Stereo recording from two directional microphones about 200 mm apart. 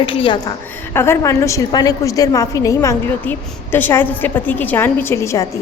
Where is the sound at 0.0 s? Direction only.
25° left (ahead or behind).